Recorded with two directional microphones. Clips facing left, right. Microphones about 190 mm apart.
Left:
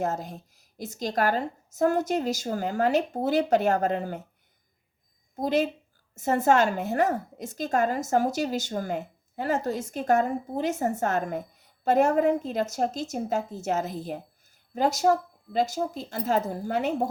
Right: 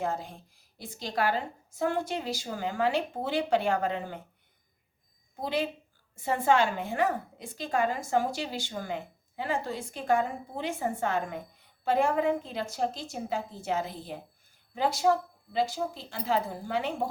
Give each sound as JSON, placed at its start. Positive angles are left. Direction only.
{"t": 0.0, "sound": "a woman's voice", "side_deg": 45}
{"t": 5.4, "sound": "a woman's voice", "side_deg": 45}